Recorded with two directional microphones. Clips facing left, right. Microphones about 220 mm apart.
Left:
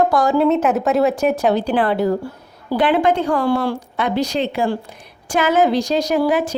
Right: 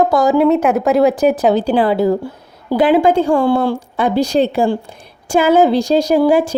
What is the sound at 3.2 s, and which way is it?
A woman's voice, 25° right (ahead or behind).